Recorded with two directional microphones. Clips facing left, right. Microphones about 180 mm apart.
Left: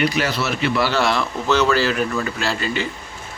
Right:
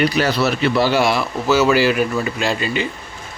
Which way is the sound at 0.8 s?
10° right (ahead or behind).